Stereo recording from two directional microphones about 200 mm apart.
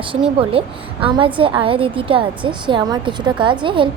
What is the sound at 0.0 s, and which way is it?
A woman's voice, 25° right (ahead or behind).